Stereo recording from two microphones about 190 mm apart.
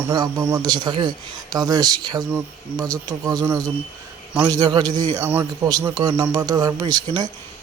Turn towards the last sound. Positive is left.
turn(degrees=-20)  # may be behind; listen again after turning